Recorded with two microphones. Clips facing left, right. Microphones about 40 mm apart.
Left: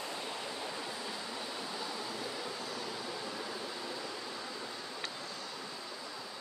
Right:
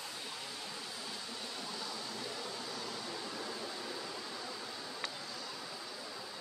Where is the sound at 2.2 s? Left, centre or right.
Centre.